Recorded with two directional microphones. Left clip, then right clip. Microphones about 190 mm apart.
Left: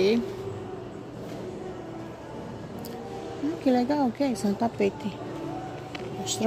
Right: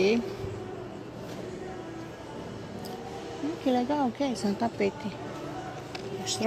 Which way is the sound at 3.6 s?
15° left (ahead or behind).